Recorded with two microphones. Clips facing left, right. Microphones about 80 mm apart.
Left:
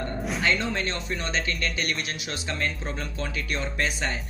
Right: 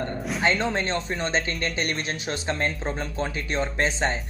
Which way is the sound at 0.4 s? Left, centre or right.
Right.